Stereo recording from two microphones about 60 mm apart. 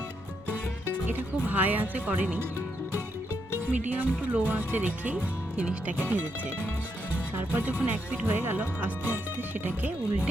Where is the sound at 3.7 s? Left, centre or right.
Right.